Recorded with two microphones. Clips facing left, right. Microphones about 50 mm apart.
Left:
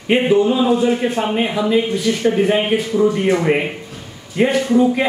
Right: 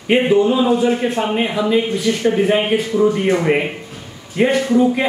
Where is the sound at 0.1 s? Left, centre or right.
Centre.